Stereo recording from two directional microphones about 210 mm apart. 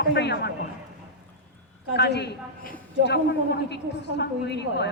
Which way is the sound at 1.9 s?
50° left (ahead or behind).